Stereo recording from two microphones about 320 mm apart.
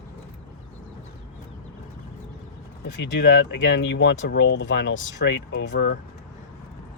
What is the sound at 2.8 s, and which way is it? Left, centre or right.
Speech, left.